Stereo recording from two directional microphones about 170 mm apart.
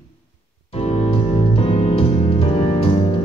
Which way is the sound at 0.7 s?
35° left (ahead or behind).